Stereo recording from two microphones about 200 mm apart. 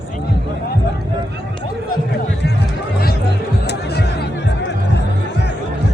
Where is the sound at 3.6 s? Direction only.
55° left (ahead or behind).